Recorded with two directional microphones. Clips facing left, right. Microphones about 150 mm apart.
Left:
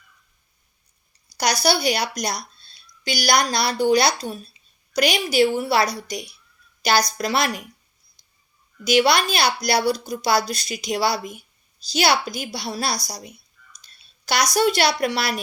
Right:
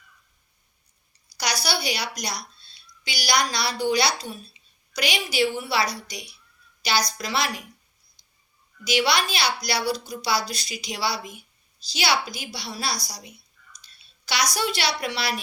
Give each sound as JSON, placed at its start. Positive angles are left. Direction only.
{"t": 1.6, "sound": "a woman's voice", "side_deg": 50}
{"t": 8.8, "sound": "speech", "side_deg": 50}
{"t": 13.8, "sound": "a sound", "side_deg": 50}
{"t": 14.5, "sound": "speech", "side_deg": 45}